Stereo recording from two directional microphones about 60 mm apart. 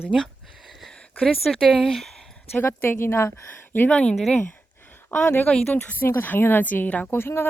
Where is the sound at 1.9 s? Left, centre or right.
Centre.